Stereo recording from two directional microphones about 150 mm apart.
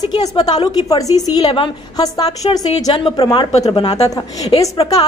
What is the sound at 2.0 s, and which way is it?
A woman's voice, 25° left (ahead or behind).